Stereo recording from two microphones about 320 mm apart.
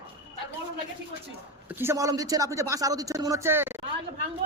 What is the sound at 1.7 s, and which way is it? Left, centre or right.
A man's voice, centre.